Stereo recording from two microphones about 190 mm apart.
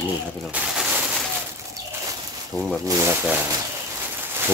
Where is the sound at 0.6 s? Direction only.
10° right (ahead or behind).